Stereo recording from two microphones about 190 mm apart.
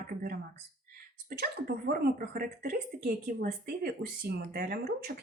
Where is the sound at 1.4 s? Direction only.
50° right (ahead or behind).